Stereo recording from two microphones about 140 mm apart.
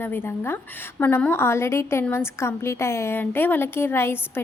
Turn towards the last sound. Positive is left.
turn(degrees=15)  # may be behind; listen again after turning